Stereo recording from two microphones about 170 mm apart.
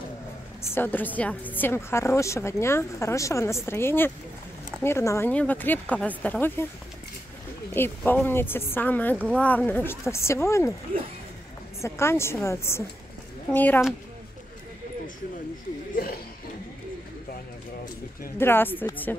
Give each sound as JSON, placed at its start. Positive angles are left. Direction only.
{"t": 0.6, "sound": "a woman's voice", "side_deg": 10}
{"t": 7.7, "sound": "a woman's voice", "side_deg": 10}
{"t": 11.8, "sound": "a woman's voice", "side_deg": 15}
{"t": 15.9, "sound": "music", "side_deg": 60}
{"t": 18.4, "sound": "a woman's voice", "side_deg": 10}